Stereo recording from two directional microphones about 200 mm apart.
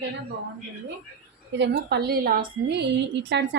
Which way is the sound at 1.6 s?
55° right (ahead or behind).